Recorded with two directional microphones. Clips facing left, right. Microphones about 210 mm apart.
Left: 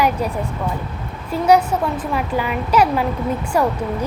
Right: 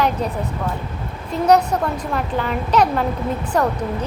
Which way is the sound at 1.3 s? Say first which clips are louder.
Left 1 dB; 5° left (ahead or behind).